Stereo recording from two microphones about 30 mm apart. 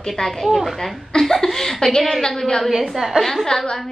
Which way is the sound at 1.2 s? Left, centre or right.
Centre.